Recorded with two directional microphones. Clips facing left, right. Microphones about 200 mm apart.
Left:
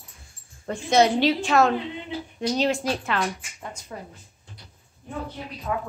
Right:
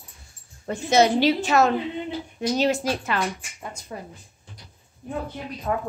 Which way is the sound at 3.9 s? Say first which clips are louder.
Right 2 dB; 20° right (ahead or behind).